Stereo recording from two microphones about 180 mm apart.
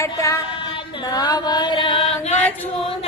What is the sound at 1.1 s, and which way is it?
Chant, 20° left (ahead or behind).